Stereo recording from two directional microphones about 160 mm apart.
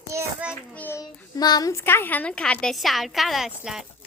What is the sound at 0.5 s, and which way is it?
Speech, 15° left (ahead or behind).